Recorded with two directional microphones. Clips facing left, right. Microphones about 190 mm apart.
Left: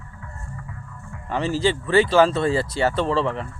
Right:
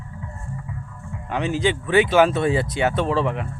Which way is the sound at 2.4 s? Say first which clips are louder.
Even; 20° right (ahead or behind).